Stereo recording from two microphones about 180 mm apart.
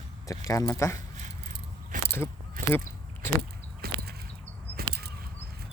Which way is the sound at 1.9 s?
50° right (ahead or behind).